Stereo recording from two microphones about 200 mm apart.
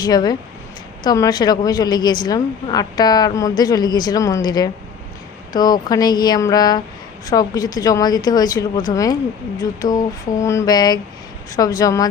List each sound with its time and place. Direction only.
0.0 s a woman's voice: 20° left (ahead or behind)